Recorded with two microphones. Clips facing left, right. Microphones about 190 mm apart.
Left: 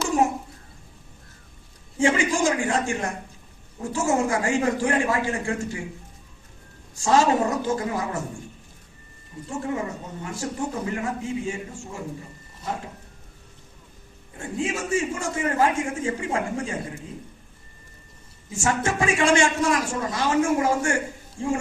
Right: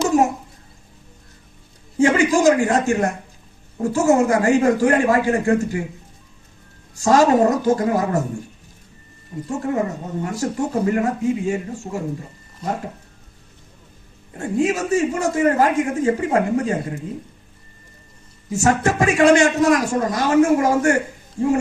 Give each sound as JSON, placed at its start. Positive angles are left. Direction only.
{"t": 2.0, "sound": "a man's voice", "side_deg": -40}
{"t": 7.0, "sound": "a man's voice", "side_deg": -40}
{"t": 9.5, "sound": "a man's voice", "side_deg": -40}
{"t": 14.3, "sound": "a man's voice", "side_deg": -40}
{"t": 18.6, "sound": "a man's voice", "side_deg": -40}